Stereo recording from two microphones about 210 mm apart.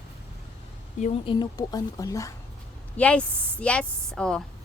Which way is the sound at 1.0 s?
25° left (ahead or behind).